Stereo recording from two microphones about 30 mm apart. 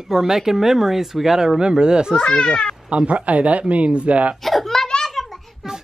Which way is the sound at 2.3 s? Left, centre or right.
Left.